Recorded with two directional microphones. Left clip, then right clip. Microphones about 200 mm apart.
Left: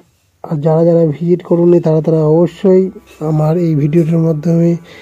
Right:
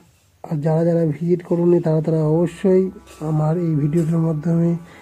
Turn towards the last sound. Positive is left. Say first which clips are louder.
# left 8 dB
turn(degrees=20)  # may be behind; listen again after turning